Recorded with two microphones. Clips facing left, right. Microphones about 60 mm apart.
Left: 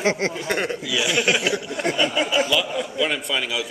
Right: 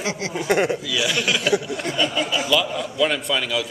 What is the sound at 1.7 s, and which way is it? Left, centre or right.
Speech, left.